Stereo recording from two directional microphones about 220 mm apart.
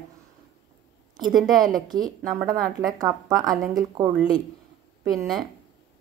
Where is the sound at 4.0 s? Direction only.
15° right (ahead or behind).